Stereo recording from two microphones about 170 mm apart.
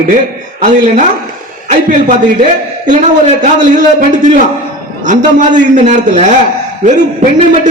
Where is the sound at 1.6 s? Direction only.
45° right (ahead or behind).